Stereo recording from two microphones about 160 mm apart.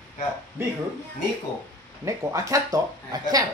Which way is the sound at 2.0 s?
20° right (ahead or behind).